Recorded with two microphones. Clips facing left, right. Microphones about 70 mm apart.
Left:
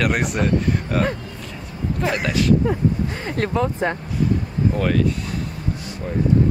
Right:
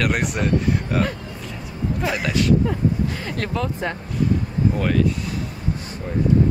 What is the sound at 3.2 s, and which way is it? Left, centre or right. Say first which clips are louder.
Speech: left 4 dB; left.